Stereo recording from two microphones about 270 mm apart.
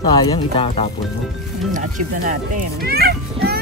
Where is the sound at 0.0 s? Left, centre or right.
Centre.